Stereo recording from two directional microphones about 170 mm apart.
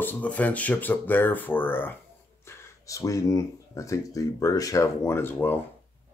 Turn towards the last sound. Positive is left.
turn(degrees=15)  # may be behind; listen again after turning